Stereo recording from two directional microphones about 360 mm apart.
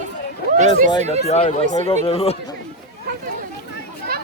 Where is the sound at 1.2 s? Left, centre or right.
Centre.